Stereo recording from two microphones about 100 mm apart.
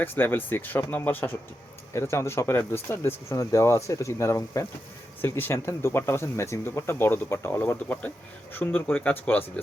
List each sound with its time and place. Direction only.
0.0 s speech: 20° left (ahead or behind)